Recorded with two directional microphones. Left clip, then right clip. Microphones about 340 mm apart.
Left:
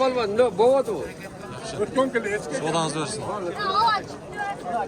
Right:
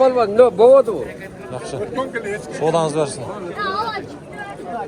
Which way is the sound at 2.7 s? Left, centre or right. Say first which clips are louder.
Right 9 dB; centre.